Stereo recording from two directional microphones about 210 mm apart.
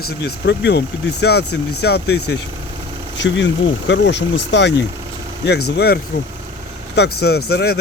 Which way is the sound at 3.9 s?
55° left (ahead or behind).